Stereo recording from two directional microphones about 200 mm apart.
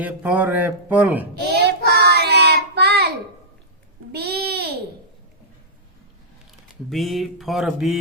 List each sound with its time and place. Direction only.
0.0 s speech: 10° right (ahead or behind)
1.5 s child singing: 55° right (ahead or behind)
4.1 s a sound: 55° right (ahead or behind)
6.9 s mantra: centre (ahead or behind)